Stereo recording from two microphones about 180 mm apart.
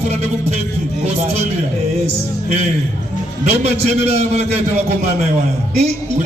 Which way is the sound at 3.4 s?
35° right (ahead or behind).